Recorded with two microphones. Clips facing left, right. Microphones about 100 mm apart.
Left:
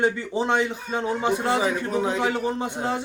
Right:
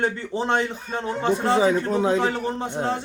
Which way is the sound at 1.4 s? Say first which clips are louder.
Right 4 dB; 30° right (ahead or behind).